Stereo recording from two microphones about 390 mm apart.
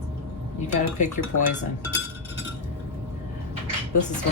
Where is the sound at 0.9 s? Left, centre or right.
Centre.